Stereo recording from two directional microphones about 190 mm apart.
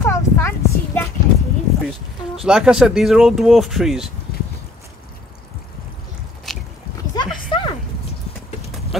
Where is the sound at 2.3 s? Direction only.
5° right (ahead or behind).